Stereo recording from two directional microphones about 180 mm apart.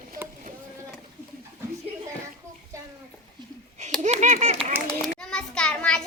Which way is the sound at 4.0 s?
40° right (ahead or behind).